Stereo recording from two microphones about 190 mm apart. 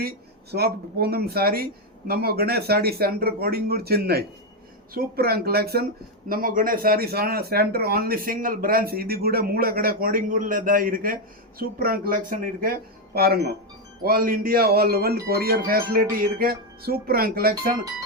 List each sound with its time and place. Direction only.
0.5 s speech: 55° right (ahead or behind)